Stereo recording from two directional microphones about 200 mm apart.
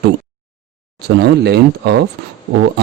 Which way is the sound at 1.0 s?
55° right (ahead or behind).